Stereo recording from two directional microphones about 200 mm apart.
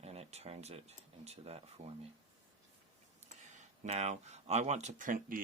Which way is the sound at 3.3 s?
35° right (ahead or behind).